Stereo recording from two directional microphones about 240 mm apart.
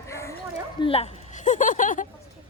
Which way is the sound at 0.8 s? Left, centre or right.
Left.